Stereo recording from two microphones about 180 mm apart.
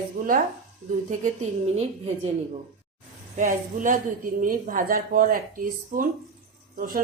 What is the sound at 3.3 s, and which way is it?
A woman's voice, 45° right (ahead or behind).